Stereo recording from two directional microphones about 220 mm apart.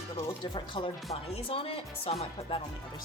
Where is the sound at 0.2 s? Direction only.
20° left (ahead or behind).